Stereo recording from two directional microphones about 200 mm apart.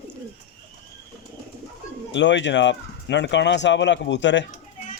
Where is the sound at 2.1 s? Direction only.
65° left (ahead or behind).